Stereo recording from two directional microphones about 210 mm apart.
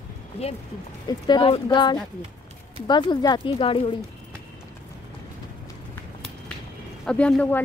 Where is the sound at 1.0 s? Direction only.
20° left (ahead or behind).